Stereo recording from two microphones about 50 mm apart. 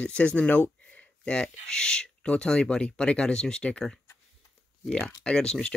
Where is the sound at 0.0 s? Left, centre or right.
Left.